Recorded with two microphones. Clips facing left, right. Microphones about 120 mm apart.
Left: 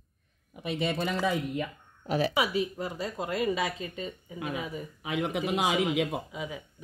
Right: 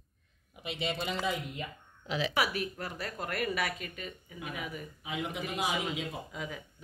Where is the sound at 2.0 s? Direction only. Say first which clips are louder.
Left 6 dB; 50° left (ahead or behind).